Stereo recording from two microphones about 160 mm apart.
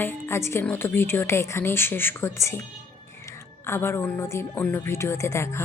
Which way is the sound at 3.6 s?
15° left (ahead or behind).